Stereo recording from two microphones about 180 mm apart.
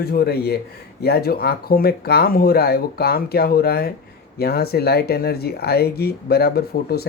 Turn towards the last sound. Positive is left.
turn(degrees=60)  # may be behind; listen again after turning